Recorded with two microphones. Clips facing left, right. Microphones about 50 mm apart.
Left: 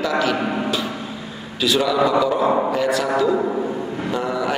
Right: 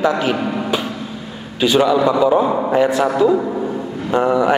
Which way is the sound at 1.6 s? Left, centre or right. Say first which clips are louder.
Right 4 dB; right.